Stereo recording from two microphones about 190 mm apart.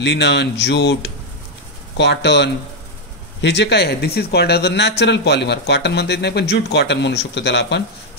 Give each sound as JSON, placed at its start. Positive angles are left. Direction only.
{"t": 0.0, "sound": "speech", "side_deg": 65}